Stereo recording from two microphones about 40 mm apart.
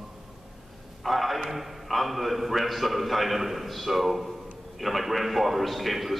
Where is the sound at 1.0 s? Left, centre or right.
Centre.